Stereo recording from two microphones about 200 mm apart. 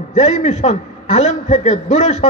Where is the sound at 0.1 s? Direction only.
35° left (ahead or behind).